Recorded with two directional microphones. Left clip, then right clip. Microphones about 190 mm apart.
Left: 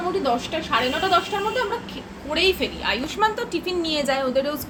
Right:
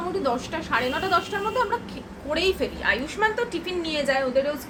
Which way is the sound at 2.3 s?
10° left (ahead or behind).